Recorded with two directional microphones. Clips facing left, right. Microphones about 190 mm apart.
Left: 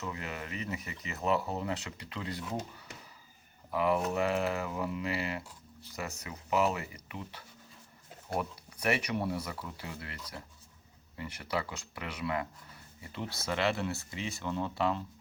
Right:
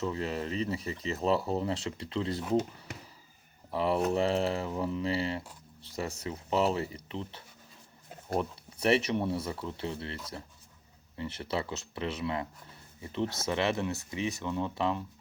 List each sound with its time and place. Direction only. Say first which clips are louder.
0.0 s speech: right 7 dB; 30° right (ahead or behind)
3.7 s speech: right 2 dB; 30° right (ahead or behind)